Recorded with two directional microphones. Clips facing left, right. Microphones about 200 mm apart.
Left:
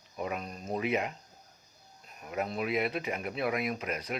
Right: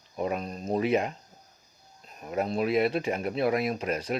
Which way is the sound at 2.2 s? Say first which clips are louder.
Right 5 dB; 35° right (ahead or behind).